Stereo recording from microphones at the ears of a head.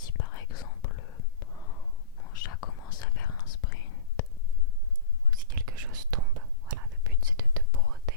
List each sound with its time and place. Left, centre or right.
0.0 s whispering: left
5.3 s whispering: right